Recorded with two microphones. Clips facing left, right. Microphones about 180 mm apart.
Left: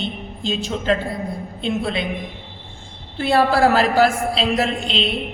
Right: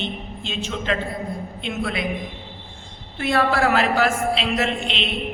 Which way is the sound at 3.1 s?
30° left (ahead or behind).